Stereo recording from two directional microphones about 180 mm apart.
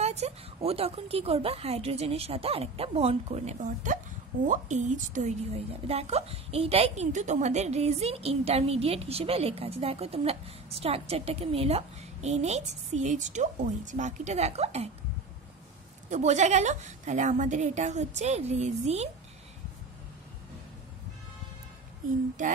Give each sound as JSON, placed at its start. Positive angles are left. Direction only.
{"t": 0.0, "sound": "a woman's voice", "side_deg": -35}
{"t": 16.1, "sound": "a woman's voice", "side_deg": -40}